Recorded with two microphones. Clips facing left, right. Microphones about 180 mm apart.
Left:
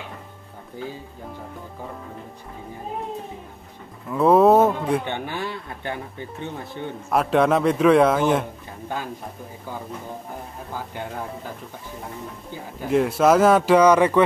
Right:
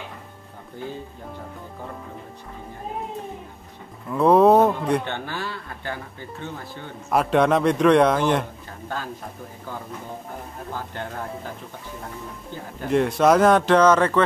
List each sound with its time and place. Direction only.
4.1 s a sound: centre (ahead or behind)
5.0 s speech: 15° left (ahead or behind)
7.1 s a man's voice: centre (ahead or behind)
8.8 s speech: 15° left (ahead or behind)
10.7 s speech: 10° left (ahead or behind)
12.8 s a man's voice: 5° left (ahead or behind)